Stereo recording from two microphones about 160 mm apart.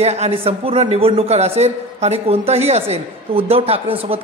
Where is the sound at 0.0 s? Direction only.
40° right (ahead or behind).